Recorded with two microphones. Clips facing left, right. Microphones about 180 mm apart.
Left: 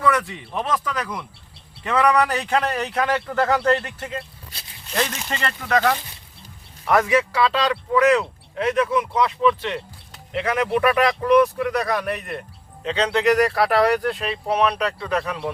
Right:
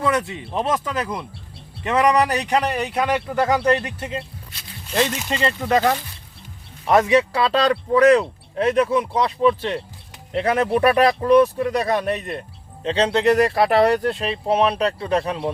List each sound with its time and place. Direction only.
0.0 s a man's voice: 25° right (ahead or behind)
5.4 s speech: 25° right (ahead or behind)
6.8 s speech: 20° right (ahead or behind)